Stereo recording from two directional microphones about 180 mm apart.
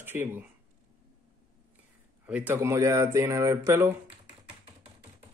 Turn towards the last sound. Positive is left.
turn(degrees=-15)  # may be behind; listen again after turning